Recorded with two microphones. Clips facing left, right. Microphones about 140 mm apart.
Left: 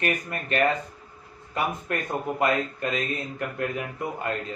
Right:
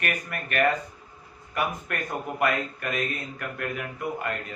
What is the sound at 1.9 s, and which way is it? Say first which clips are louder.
Speech: left 3 dB; 25° left (ahead or behind).